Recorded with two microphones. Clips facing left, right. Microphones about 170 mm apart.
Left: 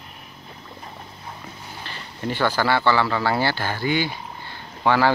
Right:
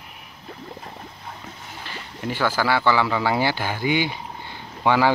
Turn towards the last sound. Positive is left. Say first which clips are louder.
# even
turn(degrees=-15)  # may be behind; listen again after turning